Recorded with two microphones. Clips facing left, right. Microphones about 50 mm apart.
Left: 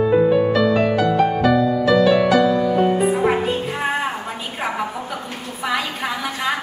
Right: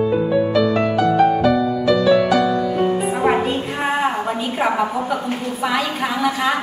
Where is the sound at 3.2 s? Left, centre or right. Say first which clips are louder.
Right 1 dB; centre.